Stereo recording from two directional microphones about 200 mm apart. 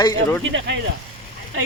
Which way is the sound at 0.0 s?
15° left (ahead or behind).